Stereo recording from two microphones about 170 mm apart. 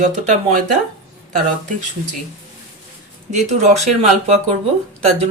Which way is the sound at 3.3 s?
45° right (ahead or behind).